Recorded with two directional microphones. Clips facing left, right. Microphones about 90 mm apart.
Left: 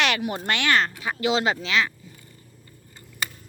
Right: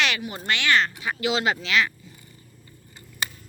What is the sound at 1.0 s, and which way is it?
Speech, 30° left (ahead or behind).